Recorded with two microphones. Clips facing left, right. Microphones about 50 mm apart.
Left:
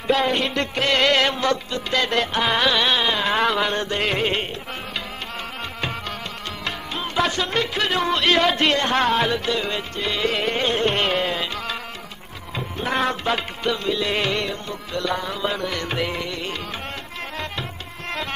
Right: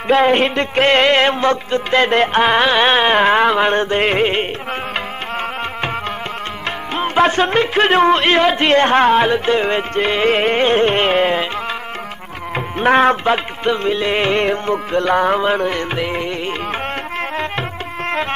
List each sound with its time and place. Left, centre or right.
0.1 s music: right
3.3 s music: right
6.9 s music: right
12.5 s music: right